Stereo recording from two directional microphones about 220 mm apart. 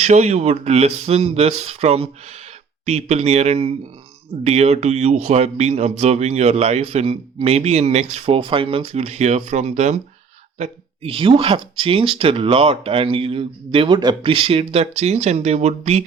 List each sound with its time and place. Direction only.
0.0 s speech: 30° right (ahead or behind)